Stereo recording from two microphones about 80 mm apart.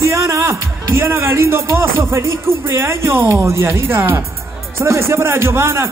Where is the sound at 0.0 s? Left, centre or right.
Right.